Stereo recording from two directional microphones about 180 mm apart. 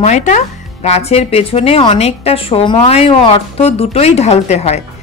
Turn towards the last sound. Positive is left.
turn(degrees=35)  # may be behind; listen again after turning